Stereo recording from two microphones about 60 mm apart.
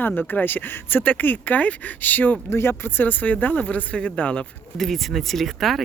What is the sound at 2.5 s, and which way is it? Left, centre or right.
Speech, left.